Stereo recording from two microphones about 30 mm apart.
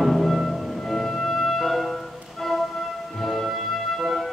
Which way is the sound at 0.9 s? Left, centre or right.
Centre.